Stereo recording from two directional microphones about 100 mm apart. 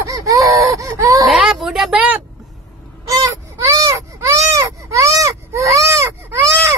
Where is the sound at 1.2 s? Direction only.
Centre (ahead or behind).